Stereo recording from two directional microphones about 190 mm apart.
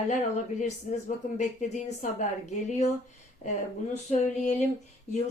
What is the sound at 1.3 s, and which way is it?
Speech, 40° left (ahead or behind).